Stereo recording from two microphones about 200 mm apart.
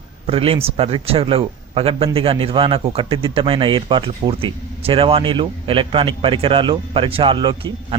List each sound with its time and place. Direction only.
0.3 s speech: 30° right (ahead or behind)